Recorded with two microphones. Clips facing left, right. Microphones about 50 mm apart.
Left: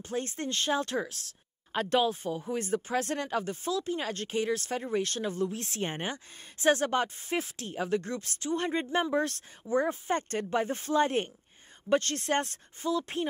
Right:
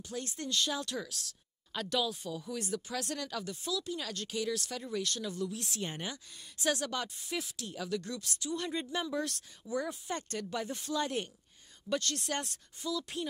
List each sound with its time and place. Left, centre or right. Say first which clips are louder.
0.0 s speech: left 6 dB; left